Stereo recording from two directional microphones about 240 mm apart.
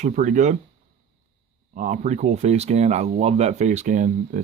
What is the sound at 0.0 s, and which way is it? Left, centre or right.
Speech, right.